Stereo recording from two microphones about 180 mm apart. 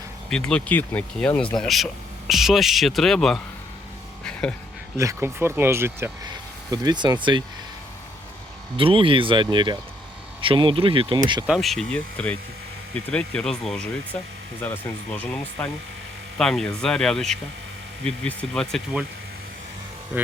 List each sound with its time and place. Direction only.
0.3 s speech: 5° left (ahead or behind)
4.2 s music: 5° left (ahead or behind)
4.9 s speech: 15° right (ahead or behind)
8.7 s speech: 30° right (ahead or behind)
11.4 s speech: centre (ahead or behind)
20.1 s speech: 10° right (ahead or behind)